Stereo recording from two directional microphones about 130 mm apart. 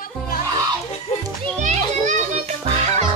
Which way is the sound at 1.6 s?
65° right (ahead or behind).